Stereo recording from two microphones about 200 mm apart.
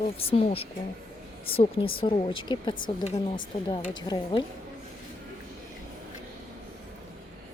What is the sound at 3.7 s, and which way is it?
Speech, 25° left (ahead or behind).